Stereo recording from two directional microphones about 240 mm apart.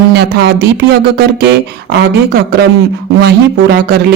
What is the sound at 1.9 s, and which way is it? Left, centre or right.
A man's voice, right.